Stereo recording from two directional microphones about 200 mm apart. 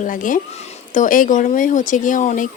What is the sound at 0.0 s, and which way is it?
A woman's voice, 40° left (ahead or behind).